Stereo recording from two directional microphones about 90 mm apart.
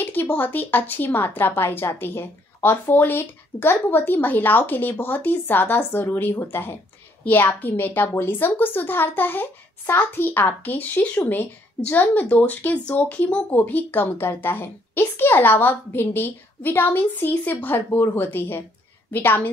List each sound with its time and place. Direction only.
0.0 s a woman's voice: 20° left (ahead or behind)